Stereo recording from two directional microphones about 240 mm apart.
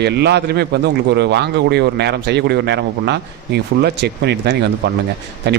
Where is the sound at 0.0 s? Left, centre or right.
Right.